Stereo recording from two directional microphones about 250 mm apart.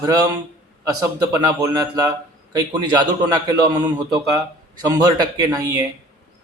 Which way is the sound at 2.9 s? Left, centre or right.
Centre.